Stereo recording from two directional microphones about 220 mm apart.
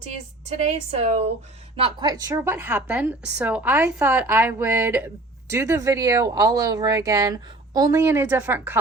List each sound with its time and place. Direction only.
0.9 s speech: 30° right (ahead or behind); by 8.8 s 10° right (ahead or behind)